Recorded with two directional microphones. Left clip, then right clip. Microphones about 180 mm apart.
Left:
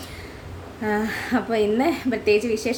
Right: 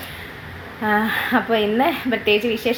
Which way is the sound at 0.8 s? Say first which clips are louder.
Right 6 dB; 20° left (ahead or behind).